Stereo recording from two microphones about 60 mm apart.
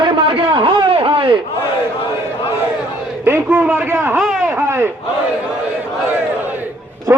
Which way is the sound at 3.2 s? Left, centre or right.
Right.